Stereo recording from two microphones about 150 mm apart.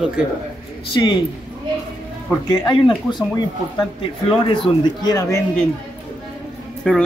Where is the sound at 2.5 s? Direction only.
30° left (ahead or behind).